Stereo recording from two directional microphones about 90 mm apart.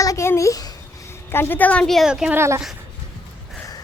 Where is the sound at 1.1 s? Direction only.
25° left (ahead or behind).